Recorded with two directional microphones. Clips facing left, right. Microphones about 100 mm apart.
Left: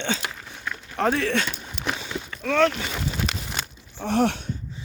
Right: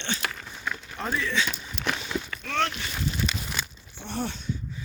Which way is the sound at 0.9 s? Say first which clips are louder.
Left 7 dB; 80° left.